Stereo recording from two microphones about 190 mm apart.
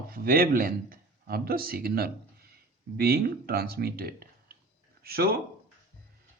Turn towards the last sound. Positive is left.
turn(degrees=-55)  # may be behind; listen again after turning